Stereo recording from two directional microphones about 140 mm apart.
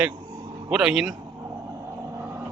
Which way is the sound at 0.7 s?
5° right (ahead or behind).